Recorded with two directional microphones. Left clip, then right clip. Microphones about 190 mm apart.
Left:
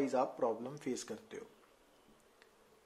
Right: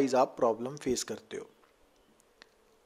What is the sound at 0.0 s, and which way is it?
Speech, 45° right (ahead or behind).